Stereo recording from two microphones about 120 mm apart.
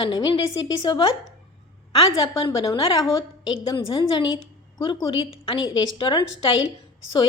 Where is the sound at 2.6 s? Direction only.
50° left (ahead or behind).